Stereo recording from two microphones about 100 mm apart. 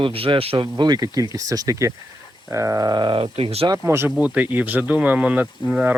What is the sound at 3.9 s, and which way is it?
Speech, 25° right (ahead or behind).